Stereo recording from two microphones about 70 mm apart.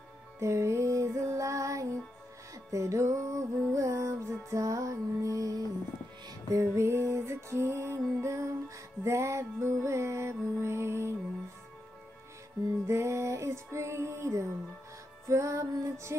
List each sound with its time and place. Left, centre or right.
0.4 s music: right
12.8 s music: right